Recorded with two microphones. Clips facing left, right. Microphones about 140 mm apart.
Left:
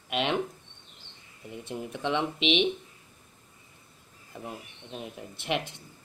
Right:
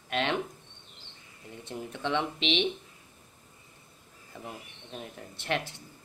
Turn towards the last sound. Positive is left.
turn(degrees=15)  # may be behind; listen again after turning